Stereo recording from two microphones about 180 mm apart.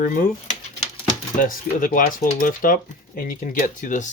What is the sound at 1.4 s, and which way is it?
Speech, 50° left (ahead or behind).